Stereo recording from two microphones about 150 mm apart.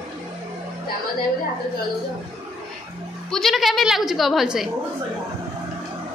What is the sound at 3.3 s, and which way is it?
Speech, centre (ahead or behind).